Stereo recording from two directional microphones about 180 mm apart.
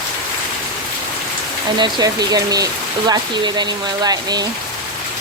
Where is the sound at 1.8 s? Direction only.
20° right (ahead or behind).